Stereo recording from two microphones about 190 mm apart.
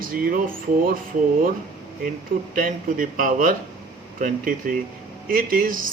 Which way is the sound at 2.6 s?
45° right (ahead or behind).